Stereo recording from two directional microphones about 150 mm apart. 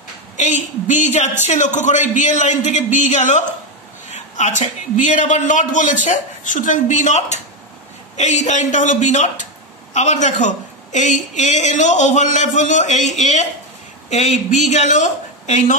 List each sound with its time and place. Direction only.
0.4 s a woman's voice: 55° left (ahead or behind)